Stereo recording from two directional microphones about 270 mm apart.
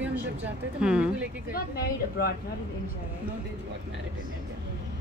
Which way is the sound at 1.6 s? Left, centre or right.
Left.